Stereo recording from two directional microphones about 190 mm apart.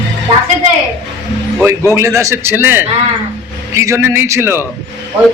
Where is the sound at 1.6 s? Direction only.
15° right (ahead or behind).